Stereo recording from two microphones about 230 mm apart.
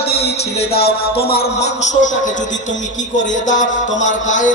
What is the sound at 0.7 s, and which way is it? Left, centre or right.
Music, left.